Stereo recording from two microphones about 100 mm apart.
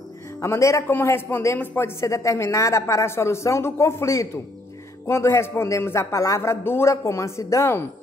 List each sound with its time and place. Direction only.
0.4 s a man's voice: 30° left (ahead or behind)